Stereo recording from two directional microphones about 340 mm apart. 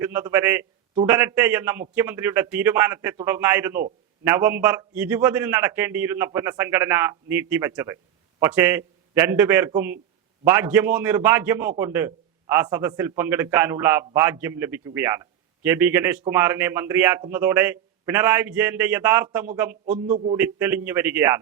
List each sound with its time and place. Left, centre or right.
0.0 s a man's voice: centre
19.8 s a man's voice: right
20.3 s a man's voice: centre